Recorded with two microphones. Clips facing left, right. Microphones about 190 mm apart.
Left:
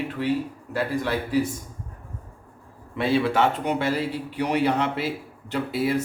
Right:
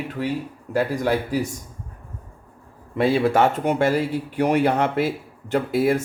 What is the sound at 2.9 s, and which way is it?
A man's voice, 45° right (ahead or behind).